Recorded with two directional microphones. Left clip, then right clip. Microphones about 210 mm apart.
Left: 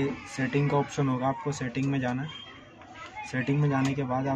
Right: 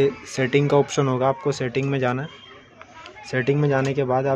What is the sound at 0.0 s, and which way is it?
Speech, 50° right (ahead or behind).